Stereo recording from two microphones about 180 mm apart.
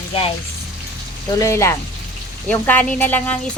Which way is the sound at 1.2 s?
20° left (ahead or behind).